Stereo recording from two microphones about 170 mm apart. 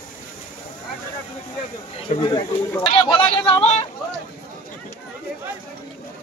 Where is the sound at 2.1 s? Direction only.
25° left (ahead or behind).